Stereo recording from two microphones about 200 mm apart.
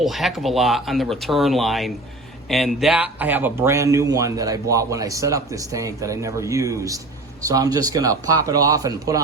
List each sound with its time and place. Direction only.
0.0 s speech: centre (ahead or behind); by 9.2 s 15° right (ahead or behind)